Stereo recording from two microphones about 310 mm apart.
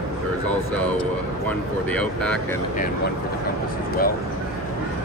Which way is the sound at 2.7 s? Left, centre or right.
Left.